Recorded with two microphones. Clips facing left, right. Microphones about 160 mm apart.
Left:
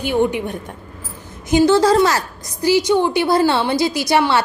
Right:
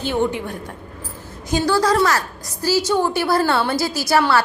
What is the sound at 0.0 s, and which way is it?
A woman's voice, 15° left (ahead or behind).